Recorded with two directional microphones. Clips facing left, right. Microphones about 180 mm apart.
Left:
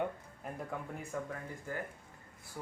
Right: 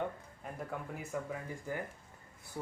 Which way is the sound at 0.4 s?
5° right (ahead or behind).